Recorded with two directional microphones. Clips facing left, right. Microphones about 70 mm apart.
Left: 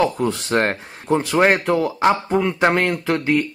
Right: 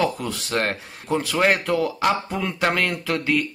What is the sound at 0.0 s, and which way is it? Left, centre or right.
A man's voice, left.